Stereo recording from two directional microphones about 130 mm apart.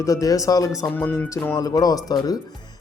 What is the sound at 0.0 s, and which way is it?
Speech, 25° left (ahead or behind).